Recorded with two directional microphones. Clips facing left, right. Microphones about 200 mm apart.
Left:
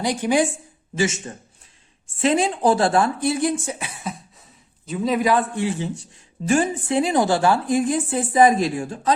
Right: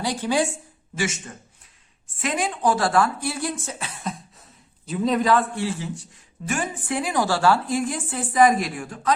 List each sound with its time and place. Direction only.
0.0 s a man's voice: 15° left (ahead or behind)